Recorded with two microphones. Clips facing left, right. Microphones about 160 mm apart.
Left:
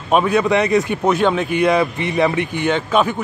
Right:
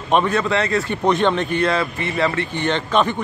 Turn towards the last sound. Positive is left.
turn(degrees=5)  # may be behind; listen again after turning